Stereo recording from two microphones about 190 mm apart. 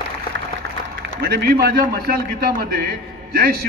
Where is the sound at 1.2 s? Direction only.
55° right (ahead or behind).